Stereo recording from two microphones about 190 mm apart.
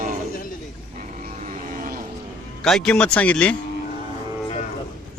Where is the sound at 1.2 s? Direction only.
45° right (ahead or behind).